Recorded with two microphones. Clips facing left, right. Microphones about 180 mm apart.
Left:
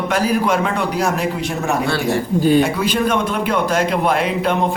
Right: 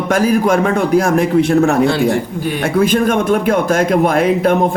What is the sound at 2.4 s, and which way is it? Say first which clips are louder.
Speech: left 7 dB; 30° left (ahead or behind).